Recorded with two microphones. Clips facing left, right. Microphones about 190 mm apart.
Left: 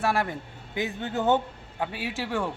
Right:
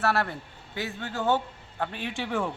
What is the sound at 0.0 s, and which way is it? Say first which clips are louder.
Speech: even; 15° left (ahead or behind).